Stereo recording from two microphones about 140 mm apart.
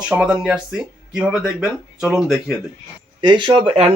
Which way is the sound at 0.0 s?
5° right (ahead or behind).